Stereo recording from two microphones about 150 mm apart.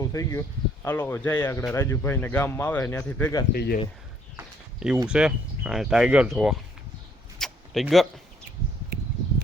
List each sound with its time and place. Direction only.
0.0 s speech: 20° left (ahead or behind)
3.5 s speech: 90° left
5.0 s speech: 5° right (ahead or behind)
7.3 s a sound: centre (ahead or behind)